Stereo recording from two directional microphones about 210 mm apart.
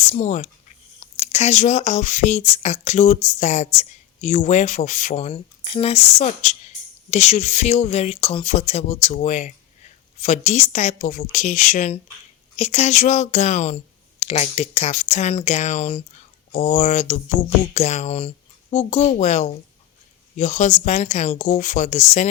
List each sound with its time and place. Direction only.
0.1 s speech: 35° left (ahead or behind)